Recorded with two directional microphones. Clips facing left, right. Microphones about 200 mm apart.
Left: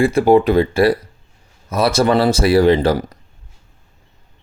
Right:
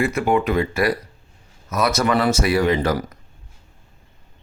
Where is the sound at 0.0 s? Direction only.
30° left (ahead or behind).